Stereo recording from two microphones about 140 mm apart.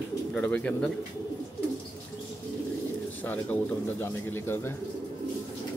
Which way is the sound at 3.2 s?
10° left (ahead or behind).